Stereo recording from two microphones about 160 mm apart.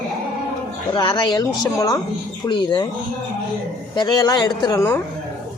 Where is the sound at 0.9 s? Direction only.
30° left (ahead or behind).